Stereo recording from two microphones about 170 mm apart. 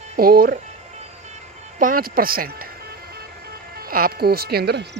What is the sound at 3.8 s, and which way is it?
Speech, 60° right (ahead or behind).